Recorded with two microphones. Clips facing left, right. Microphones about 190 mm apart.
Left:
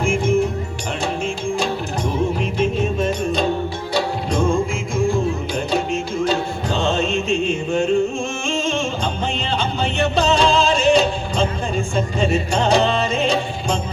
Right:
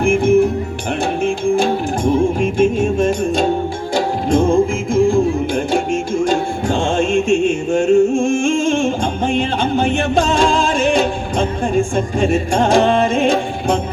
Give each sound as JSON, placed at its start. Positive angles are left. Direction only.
{"t": 0.0, "sound": "music", "side_deg": -55}